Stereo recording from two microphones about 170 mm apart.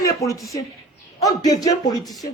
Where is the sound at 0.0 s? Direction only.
20° left (ahead or behind).